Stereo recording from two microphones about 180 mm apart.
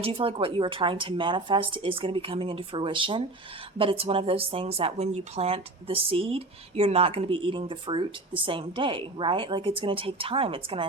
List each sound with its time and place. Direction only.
0.0 s a woman's voice: 30° right (ahead or behind)